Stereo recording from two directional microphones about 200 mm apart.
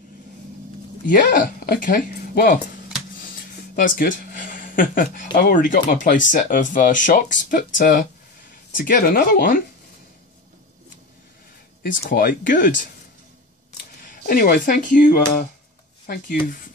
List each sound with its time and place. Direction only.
1.0 s speech: 45° left (ahead or behind)
3.8 s speech: 40° left (ahead or behind)
11.8 s speech: 50° left (ahead or behind)
14.2 s speech: 45° left (ahead or behind)